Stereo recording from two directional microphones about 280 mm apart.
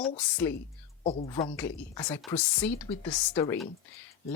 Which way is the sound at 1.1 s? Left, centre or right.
Centre.